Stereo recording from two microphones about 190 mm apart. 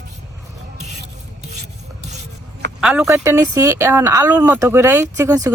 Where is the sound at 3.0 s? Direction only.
15° right (ahead or behind).